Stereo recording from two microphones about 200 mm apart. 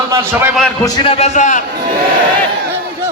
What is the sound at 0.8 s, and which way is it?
Speech, 20° left (ahead or behind).